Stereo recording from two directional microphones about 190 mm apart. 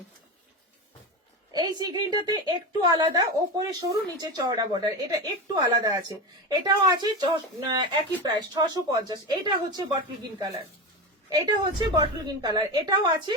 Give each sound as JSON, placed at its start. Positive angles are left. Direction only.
{"t": 1.5, "sound": "a woman's voice", "side_deg": -20}
{"t": 11.3, "sound": "a woman's voice", "side_deg": -20}